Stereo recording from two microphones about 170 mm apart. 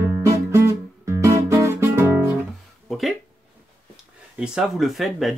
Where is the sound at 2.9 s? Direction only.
Centre (ahead or behind).